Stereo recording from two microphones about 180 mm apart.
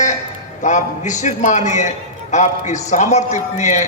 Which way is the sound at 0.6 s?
40° left (ahead or behind).